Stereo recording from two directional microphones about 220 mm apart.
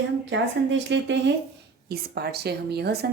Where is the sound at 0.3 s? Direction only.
55° right (ahead or behind).